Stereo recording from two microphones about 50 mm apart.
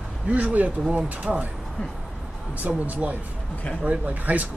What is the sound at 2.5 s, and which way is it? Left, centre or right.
Speech, right.